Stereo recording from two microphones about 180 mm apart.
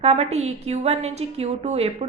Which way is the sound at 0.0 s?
35° right (ahead or behind).